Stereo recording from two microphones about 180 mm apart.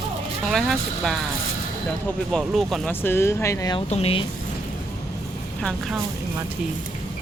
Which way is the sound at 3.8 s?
35° left (ahead or behind).